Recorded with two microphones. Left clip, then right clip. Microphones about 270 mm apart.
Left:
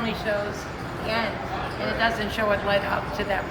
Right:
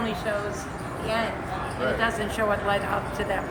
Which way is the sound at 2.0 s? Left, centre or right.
Centre.